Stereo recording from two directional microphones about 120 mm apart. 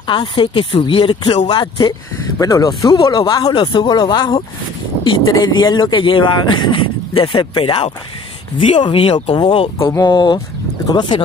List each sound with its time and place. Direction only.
0.0 s speech: 40° left (ahead or behind)
3.5 s speech: 40° left (ahead or behind)